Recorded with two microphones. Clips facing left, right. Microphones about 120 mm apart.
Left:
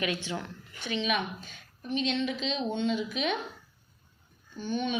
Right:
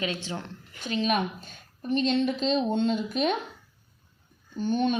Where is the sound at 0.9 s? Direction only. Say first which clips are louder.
Right 4 dB; 45° right (ahead or behind).